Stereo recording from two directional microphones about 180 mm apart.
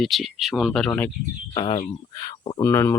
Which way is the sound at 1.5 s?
25° left (ahead or behind).